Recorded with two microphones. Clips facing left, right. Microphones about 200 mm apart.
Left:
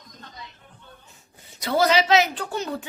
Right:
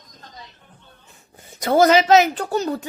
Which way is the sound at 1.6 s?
45° right (ahead or behind).